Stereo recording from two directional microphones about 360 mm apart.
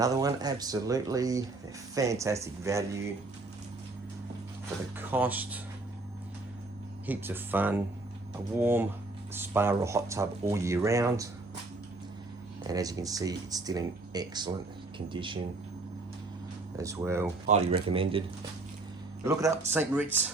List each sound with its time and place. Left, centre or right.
0.0 s speech: centre
4.9 s speech: centre
7.1 s speech: centre
12.6 s speech: centre
16.7 s speech: centre
19.2 s speech: centre